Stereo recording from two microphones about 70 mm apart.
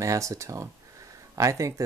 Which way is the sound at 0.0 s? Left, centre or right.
Right.